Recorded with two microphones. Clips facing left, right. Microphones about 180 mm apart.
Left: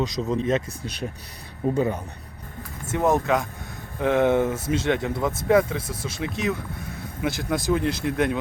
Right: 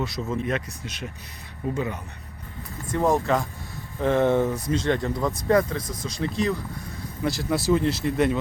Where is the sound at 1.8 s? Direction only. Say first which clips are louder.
Left 6 dB; 40° left (ahead or behind).